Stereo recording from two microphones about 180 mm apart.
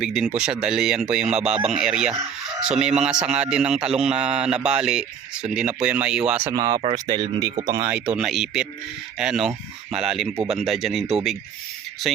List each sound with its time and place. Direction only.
0.0 s a man's voice: 5° right (ahead or behind)
6.5 s speech: 20° right (ahead or behind)
7.7 s speech: 15° right (ahead or behind)
8.1 s a man's voice: centre (ahead or behind)